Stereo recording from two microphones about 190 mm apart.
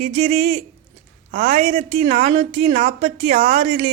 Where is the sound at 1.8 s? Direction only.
30° right (ahead or behind).